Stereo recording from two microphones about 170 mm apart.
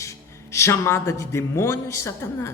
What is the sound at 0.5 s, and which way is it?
A man's voice, 15° left (ahead or behind).